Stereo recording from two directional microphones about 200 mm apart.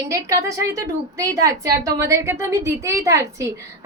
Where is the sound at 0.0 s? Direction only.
15° right (ahead or behind).